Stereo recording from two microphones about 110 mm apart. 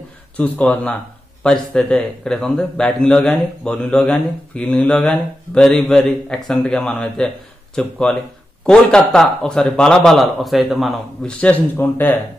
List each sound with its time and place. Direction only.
0.4 s a man's voice: 10° left (ahead or behind)
11.4 s a man's voice: 15° left (ahead or behind)